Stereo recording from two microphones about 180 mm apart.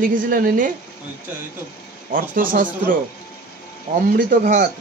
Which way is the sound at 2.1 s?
50° right (ahead or behind).